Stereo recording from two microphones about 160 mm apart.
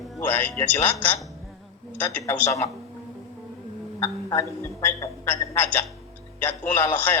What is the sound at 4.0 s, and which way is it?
A woman's voice, 15° left (ahead or behind).